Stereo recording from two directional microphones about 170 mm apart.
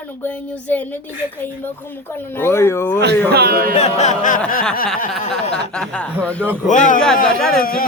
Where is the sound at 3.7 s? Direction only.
35° left (ahead or behind).